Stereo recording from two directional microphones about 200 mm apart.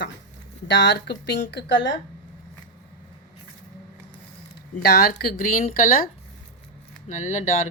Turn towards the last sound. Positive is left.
turn(degrees=40)  # may be behind; listen again after turning